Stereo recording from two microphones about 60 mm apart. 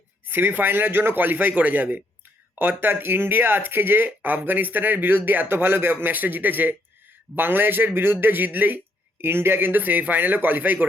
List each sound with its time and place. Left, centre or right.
0.3 s speech: right